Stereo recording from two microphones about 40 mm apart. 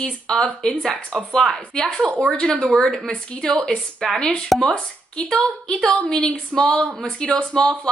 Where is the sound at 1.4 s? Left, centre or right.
Centre.